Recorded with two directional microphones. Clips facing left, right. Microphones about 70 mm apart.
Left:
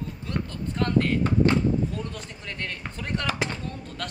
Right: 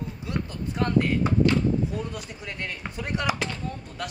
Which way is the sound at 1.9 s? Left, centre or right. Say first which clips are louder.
Right 2 dB; centre.